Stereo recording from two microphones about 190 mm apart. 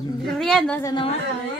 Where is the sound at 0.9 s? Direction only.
25° left (ahead or behind).